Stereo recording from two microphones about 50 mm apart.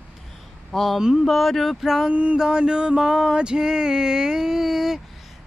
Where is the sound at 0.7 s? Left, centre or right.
Centre.